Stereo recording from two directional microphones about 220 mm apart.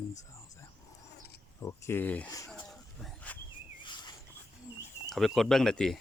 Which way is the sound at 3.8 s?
20° left (ahead or behind).